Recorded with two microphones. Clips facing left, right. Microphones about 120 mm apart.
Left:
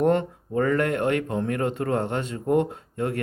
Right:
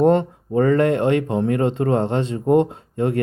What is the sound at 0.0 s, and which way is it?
Speech, 25° right (ahead or behind).